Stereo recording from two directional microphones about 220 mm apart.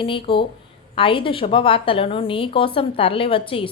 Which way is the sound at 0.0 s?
25° left (ahead or behind).